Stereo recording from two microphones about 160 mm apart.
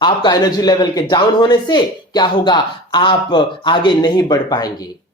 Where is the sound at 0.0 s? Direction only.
25° left (ahead or behind).